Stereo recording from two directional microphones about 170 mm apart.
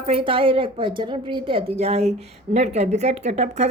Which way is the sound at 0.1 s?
30° right (ahead or behind).